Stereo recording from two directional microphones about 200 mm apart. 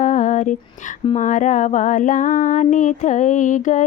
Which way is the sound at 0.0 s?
35° left (ahead or behind).